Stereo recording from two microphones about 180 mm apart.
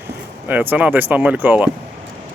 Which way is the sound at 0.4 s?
10° right (ahead or behind).